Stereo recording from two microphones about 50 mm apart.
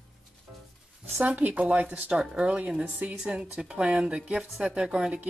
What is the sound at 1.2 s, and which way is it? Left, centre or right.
Speech, right.